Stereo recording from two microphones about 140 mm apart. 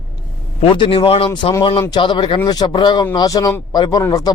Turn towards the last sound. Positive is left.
turn(degrees=25)  # may be behind; listen again after turning